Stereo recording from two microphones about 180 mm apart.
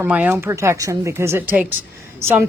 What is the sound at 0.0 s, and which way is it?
Speech, 10° right (ahead or behind).